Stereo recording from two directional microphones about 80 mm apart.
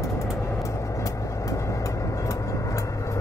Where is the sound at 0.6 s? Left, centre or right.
Left.